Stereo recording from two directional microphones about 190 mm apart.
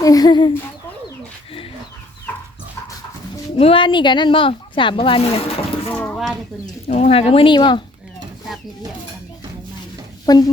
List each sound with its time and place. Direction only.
0.0 s speech: 20° left (ahead or behind)
3.6 s speech: 30° left (ahead or behind)
5.9 s a sound: 10° left (ahead or behind)
6.8 s speech: 35° left (ahead or behind)
10.2 s speech: 20° left (ahead or behind)